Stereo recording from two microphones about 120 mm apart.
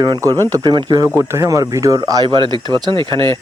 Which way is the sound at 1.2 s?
25° right (ahead or behind).